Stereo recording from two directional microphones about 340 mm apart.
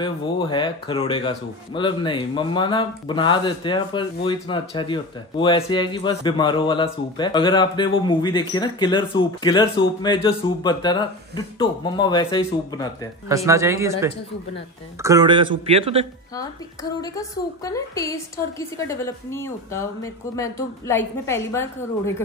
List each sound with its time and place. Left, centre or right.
0.0 s a man's voice: centre
13.3 s speech: centre
17.0 s a man's voice: centre